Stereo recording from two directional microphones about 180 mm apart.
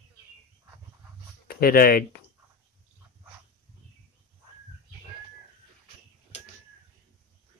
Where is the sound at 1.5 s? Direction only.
55° left (ahead or behind).